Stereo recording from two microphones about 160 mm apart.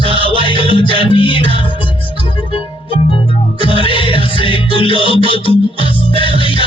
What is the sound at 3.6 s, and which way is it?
Music, 35° left (ahead or behind).